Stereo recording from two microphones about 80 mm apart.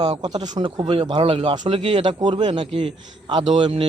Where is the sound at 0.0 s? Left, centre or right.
Right.